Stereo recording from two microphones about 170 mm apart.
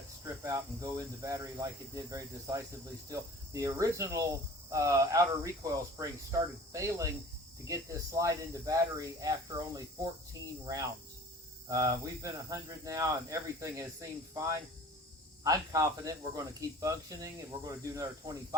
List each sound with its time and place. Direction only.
0.4 s speech: 20° right (ahead or behind)
11.7 s speech: 20° right (ahead or behind)